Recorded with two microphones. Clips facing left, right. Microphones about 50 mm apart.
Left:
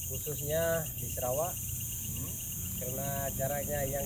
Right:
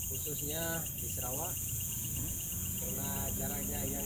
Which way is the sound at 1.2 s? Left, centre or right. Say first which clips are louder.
Left 11 dB; left.